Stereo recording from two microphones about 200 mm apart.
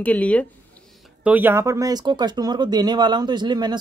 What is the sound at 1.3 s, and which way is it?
Speech, 10° right (ahead or behind).